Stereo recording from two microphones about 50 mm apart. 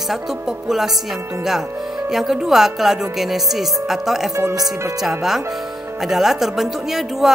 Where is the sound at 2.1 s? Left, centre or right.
Centre.